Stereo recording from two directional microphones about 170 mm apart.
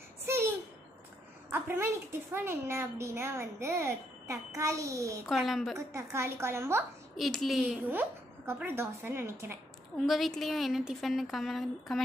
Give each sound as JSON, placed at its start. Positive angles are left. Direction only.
{"t": 0.3, "sound": "a sound", "side_deg": -15}
{"t": 1.5, "sound": "a woman's voice", "side_deg": -10}
{"t": 5.2, "sound": "a woman's voice", "side_deg": 0}
{"t": 5.8, "sound": "a child's voice", "side_deg": -15}
{"t": 7.2, "sound": "a child's voice", "side_deg": 0}
{"t": 9.9, "sound": "a woman's voice", "side_deg": 0}